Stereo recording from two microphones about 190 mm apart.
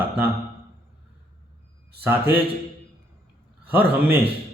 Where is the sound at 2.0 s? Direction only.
10° right (ahead or behind).